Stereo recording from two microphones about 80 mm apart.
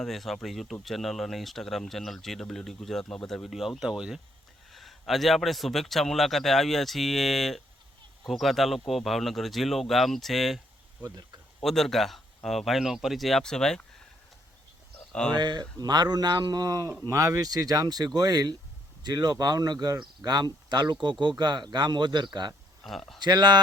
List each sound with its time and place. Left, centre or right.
0.0 s speech: centre
11.0 s speech: right
11.6 s speech: centre
15.4 s speech: right
22.8 s speech: centre
23.2 s speech: right